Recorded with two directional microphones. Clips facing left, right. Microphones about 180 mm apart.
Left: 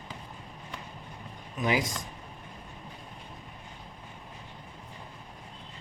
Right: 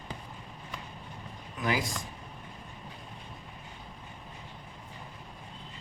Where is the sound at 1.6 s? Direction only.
20° left (ahead or behind).